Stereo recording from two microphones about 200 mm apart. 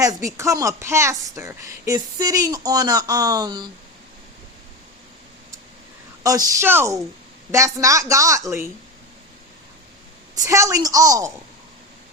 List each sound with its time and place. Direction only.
0.0 s a woman's voice: 15° right (ahead or behind)
6.2 s a woman's voice: 15° right (ahead or behind)
10.3 s a woman's voice: 15° right (ahead or behind)